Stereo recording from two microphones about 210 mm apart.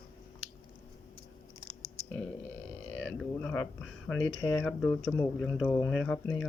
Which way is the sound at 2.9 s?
5° left (ahead or behind).